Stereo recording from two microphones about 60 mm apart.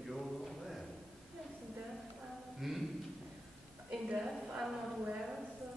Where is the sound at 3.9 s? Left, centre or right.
Centre.